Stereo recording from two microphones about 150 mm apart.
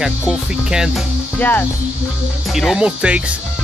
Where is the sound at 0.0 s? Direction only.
5° right (ahead or behind).